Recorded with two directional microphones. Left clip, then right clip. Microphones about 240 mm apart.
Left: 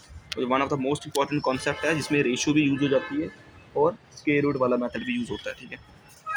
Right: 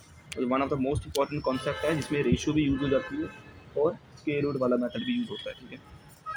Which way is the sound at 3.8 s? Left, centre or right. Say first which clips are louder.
Left 5 dB; left.